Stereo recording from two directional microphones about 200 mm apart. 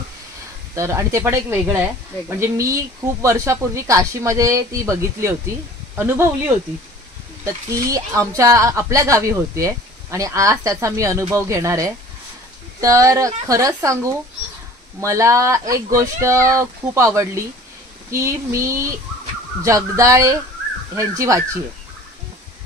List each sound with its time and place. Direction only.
0.7 s speech: 15° right (ahead or behind)
7.4 s speech: 15° right (ahead or behind)